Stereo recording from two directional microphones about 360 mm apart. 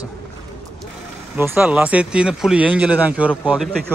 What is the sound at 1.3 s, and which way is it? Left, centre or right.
Speech, centre.